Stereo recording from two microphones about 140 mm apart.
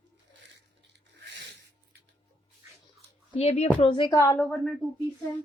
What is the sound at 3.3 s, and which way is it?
Speech, 50° left (ahead or behind).